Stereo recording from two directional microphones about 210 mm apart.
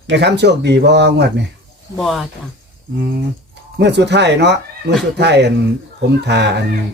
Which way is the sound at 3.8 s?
55° right (ahead or behind).